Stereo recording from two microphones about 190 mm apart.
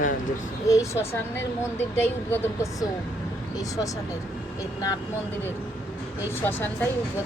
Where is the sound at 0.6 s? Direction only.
15° left (ahead or behind).